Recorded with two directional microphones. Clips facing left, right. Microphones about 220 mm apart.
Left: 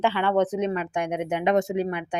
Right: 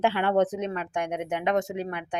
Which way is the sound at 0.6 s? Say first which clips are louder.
Left 4 dB; 10° left (ahead or behind).